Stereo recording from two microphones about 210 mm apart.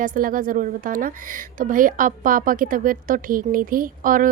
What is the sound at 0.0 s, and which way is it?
A woman's voice, 40° right (ahead or behind).